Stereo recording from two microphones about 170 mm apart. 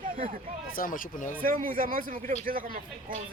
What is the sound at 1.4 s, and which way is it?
Speech, 55° right (ahead or behind).